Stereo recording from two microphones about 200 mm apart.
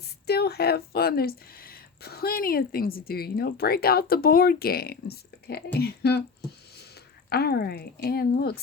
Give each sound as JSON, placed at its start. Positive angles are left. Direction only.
{"t": 0.3, "sound": "speech", "side_deg": 55}
{"t": 7.3, "sound": "speech", "side_deg": 50}